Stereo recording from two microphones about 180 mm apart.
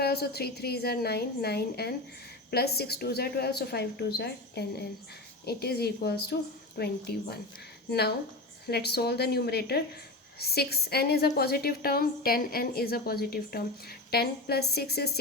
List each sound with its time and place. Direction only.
0.0 s a woman's voice: 60° left (ahead or behind)